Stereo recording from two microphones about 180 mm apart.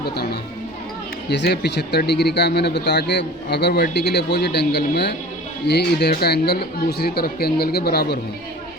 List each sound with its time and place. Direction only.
0.0 s speech: 60° left (ahead or behind)